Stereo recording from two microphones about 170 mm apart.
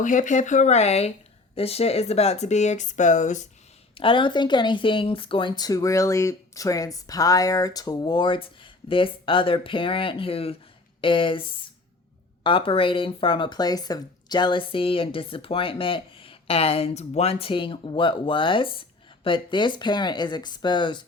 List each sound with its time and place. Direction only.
0.0 s speech: 50° left (ahead or behind)
3.9 s speech: 30° left (ahead or behind)